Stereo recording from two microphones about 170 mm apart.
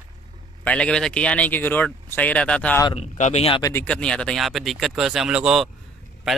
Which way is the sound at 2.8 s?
40° left (ahead or behind).